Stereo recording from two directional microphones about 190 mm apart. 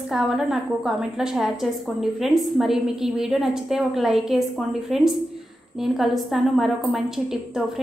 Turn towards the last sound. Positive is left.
turn(degrees=0)  # may be behind; listen again after turning